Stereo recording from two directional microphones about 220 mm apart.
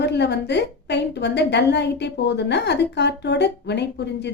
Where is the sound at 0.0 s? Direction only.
50° left (ahead or behind).